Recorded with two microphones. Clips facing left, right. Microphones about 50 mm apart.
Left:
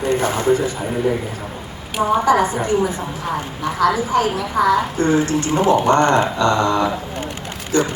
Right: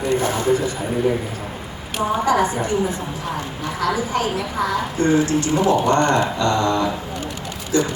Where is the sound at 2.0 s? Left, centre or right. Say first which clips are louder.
Left 4 dB; left.